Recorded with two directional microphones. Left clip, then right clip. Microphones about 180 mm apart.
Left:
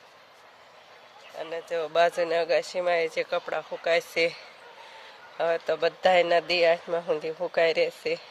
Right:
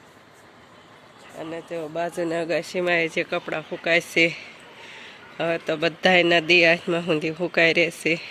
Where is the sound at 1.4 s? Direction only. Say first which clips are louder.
Right 1 dB; 10° left (ahead or behind).